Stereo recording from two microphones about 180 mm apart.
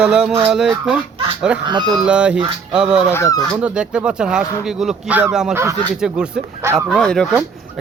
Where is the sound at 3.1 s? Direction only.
15° left (ahead or behind).